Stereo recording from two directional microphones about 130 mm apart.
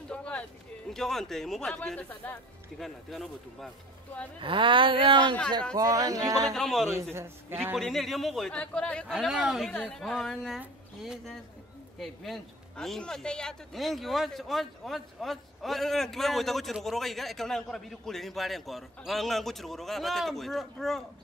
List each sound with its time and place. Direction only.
0.1 s speech: 10° left (ahead or behind)
2.8 s a man's voice: centre (ahead or behind)
4.4 s speech: 40° right (ahead or behind)
5.8 s speech: 25° right (ahead or behind)
6.5 s a man's voice: centre (ahead or behind)
7.2 s a man's voice: 15° right (ahead or behind)
7.7 s a man's voice: centre (ahead or behind)
9.1 s a man's voice: centre (ahead or behind)
9.7 s a man's voice: 5° left (ahead or behind)